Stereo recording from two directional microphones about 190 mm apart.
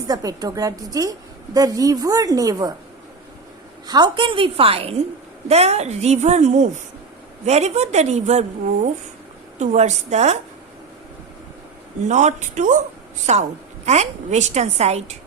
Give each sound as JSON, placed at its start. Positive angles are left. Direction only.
{"t": 0.1, "sound": "a woman's voice", "side_deg": -20}
{"t": 3.8, "sound": "a woman's voice", "side_deg": -20}
{"t": 12.0, "sound": "a woman's voice", "side_deg": -40}